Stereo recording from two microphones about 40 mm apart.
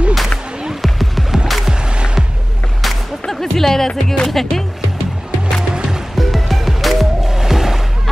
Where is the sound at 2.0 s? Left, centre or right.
Right.